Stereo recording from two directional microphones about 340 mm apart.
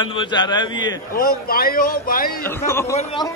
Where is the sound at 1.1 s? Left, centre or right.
Left.